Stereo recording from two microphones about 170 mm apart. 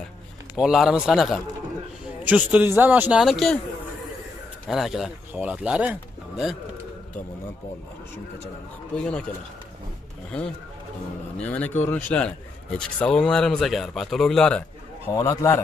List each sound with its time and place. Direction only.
0.6 s speech: 5° right (ahead or behind)
4.6 s speech: centre (ahead or behind)
8.9 s a man's voice: 5° left (ahead or behind)
11.3 s speech: 10° left (ahead or behind)
15.0 s a man's voice: 20° left (ahead or behind)